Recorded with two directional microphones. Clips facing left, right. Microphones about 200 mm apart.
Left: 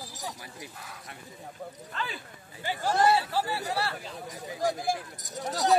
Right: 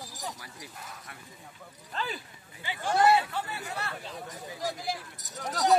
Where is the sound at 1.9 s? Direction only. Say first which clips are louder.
Right 2 dB; 45° right (ahead or behind).